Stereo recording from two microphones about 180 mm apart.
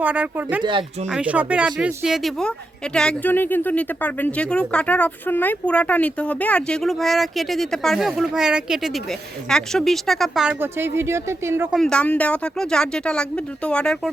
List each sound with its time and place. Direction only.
0.0 s speech: 10° right (ahead or behind)
0.6 s speech: 25° right (ahead or behind)
1.0 s speech: 5° right (ahead or behind)
11.8 s speech: 5° left (ahead or behind)